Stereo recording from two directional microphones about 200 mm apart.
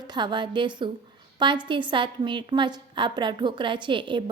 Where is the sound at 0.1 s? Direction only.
25° right (ahead or behind).